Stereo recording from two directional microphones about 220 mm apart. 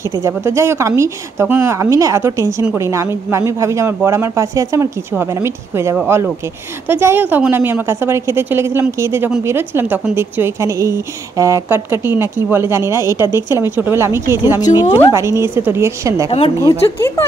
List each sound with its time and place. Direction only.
0.0 s a woman's voice: 15° right (ahead or behind)
14.6 s speech: 20° left (ahead or behind)
15.1 s a woman's voice: 10° right (ahead or behind)
16.3 s speech: 25° left (ahead or behind)